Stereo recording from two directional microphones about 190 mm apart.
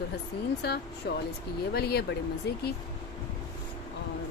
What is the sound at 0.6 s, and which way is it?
Speech, 60° left (ahead or behind).